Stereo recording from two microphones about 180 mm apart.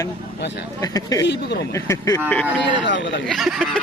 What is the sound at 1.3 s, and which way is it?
Speech, 65° left (ahead or behind).